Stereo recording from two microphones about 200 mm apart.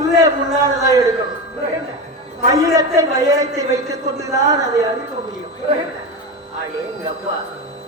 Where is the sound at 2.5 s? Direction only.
15° right (ahead or behind).